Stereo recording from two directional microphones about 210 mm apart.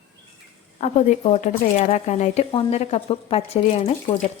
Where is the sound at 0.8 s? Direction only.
35° left (ahead or behind).